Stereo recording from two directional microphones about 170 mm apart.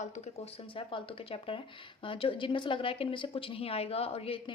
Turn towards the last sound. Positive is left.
turn(degrees=35)  # may be behind; listen again after turning